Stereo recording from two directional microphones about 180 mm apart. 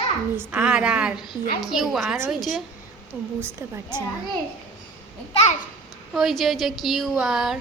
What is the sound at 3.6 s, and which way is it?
Speech, 10° right (ahead or behind).